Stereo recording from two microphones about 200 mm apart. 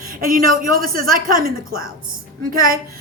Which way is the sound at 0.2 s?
45° right (ahead or behind).